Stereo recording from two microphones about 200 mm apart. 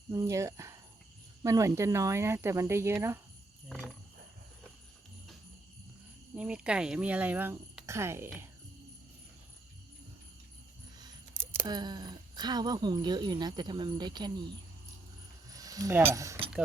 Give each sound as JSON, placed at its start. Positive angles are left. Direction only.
{"t": 0.1, "sound": "speech", "side_deg": -15}
{"t": 3.7, "sound": "speech", "side_deg": 0}
{"t": 6.3, "sound": "speech", "side_deg": -5}
{"t": 11.0, "sound": "speech", "side_deg": -15}
{"t": 15.4, "sound": "pulleys", "side_deg": -15}
{"t": 16.1, "sound": "speech", "side_deg": -15}